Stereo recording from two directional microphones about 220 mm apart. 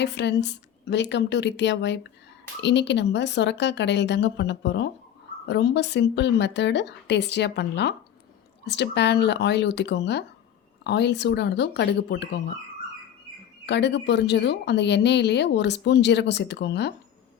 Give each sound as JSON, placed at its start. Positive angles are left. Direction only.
{"t": 0.0, "sound": "a woman's voice", "side_deg": 50}
{"t": 13.7, "sound": "a woman's voice", "side_deg": 50}